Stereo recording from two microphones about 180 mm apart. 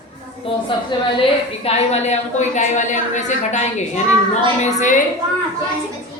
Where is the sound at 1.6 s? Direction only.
35° left (ahead or behind).